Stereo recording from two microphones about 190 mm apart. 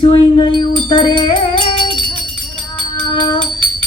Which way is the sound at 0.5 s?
25° left (ahead or behind).